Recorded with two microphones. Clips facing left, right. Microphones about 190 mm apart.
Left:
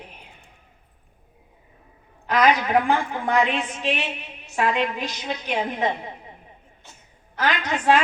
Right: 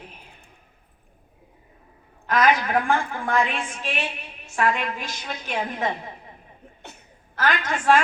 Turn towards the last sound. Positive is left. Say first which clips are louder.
# even
turn(degrees=20)  # may be behind; listen again after turning